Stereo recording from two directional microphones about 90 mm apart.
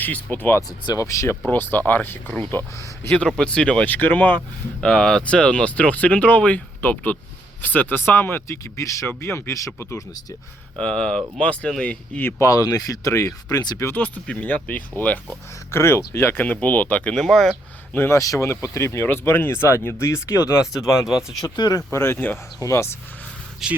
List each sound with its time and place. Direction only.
0.0 s speech: 20° left (ahead or behind)
0.9 s speech: 35° left (ahead or behind)
1.5 s speech: 20° left (ahead or behind)
3.2 s speech: 10° left (ahead or behind)
4.8 s speech: 5° left (ahead or behind); by 10.0 s 35° left (ahead or behind)
10.8 s speech: 10° left (ahead or behind)
12.4 s speech: 40° left (ahead or behind)
13.9 s speech: 15° left (ahead or behind)
15.7 s speech: 30° left (ahead or behind)
17.2 s speech: centre (ahead or behind)
18.1 s speech: 35° left (ahead or behind)
21.4 s speech: 50° left (ahead or behind)
21.9 s speech: 25° left (ahead or behind)
23.6 s speech: 5° right (ahead or behind)